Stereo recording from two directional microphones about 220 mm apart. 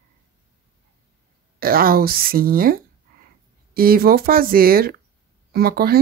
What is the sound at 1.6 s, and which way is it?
Speech, 40° right (ahead or behind).